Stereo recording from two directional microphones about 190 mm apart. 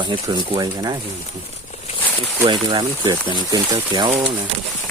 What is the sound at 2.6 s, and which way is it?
Speech, 20° right (ahead or behind).